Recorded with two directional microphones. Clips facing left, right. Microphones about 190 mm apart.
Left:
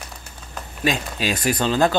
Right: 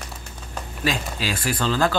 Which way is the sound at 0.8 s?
20° left (ahead or behind).